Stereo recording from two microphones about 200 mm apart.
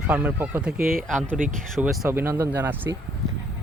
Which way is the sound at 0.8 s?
45° right (ahead or behind).